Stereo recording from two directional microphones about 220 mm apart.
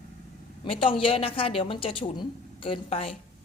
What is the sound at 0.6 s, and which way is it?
A woman's voice, 25° left (ahead or behind).